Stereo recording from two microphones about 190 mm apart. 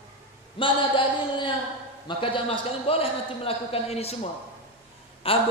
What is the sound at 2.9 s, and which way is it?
A man's voice, 30° left (ahead or behind).